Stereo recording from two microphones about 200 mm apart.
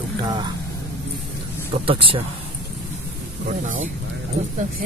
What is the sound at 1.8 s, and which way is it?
Speech, 25° right (ahead or behind).